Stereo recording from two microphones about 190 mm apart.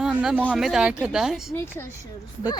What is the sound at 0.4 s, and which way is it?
Speech, centre (ahead or behind).